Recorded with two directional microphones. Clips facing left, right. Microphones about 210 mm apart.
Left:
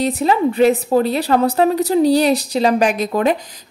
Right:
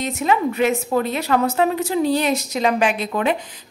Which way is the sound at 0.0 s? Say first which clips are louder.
Left 4 dB; 35° left (ahead or behind).